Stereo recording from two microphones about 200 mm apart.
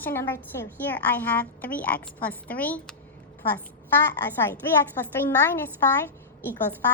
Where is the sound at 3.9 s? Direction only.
10° left (ahead or behind).